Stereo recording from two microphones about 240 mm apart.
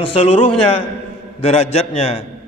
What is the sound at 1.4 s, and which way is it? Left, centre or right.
Speech, left.